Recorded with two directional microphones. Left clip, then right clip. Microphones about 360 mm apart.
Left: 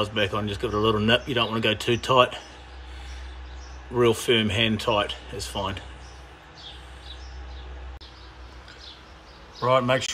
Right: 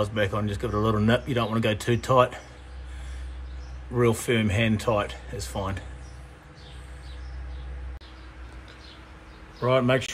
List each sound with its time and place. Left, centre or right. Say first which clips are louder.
0.0 s speech: left 1 dB; centre
3.9 s speech: left 3 dB; centre
9.6 s speech: left 1 dB; centre